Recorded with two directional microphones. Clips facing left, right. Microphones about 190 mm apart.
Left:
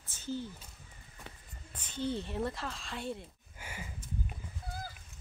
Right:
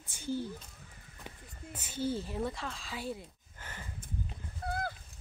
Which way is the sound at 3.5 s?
10° left (ahead or behind).